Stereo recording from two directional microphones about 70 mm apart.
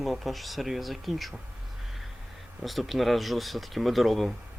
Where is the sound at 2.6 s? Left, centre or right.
Centre.